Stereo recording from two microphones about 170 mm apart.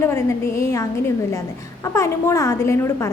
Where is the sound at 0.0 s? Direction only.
15° left (ahead or behind).